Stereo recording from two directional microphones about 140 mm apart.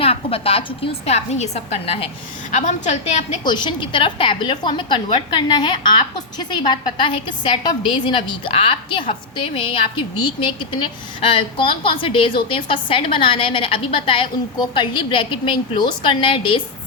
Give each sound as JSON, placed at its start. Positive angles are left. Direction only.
{"t": 0.0, "sound": "a woman's voice", "side_deg": 45}
{"t": 3.4, "sound": "a woman's voice", "side_deg": 35}